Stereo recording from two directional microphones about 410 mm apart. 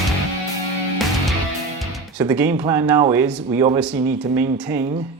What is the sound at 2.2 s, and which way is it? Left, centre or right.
Speech, centre.